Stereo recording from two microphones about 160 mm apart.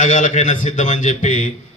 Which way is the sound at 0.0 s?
50° left (ahead or behind).